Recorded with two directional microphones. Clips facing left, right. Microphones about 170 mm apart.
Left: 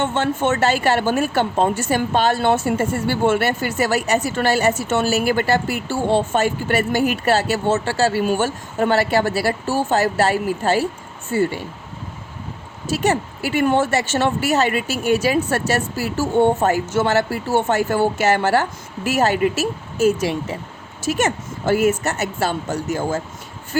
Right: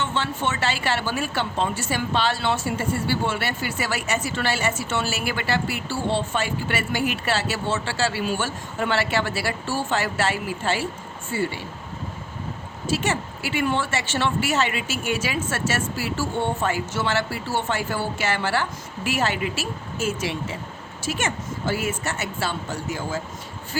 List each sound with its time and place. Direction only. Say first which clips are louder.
0.0 s a woman's voice: left 6 dB; 50° left (ahead or behind)
12.9 s a woman's voice: left 5 dB; 40° left (ahead or behind)